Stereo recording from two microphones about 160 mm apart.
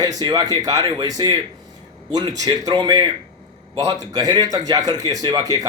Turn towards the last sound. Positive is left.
turn(degrees=-20)  # may be behind; listen again after turning